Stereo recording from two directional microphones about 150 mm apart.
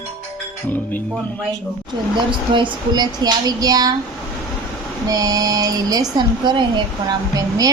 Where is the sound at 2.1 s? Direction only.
30° right (ahead or behind).